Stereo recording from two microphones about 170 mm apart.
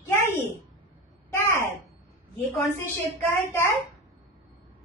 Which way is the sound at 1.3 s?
10° left (ahead or behind).